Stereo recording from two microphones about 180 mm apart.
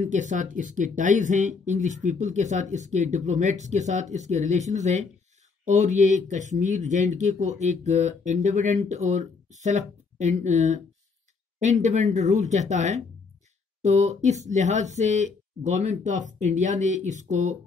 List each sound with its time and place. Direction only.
0.0 s speech: 45° right (ahead or behind)